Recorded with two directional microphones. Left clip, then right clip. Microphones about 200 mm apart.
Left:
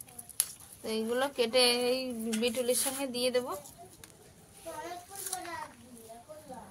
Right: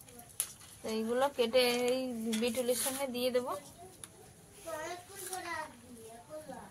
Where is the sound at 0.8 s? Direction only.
30° left (ahead or behind).